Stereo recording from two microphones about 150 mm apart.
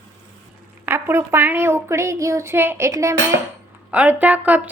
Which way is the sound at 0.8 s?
15° right (ahead or behind).